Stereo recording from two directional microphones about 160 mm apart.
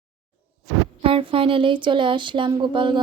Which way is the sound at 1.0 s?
35° right (ahead or behind).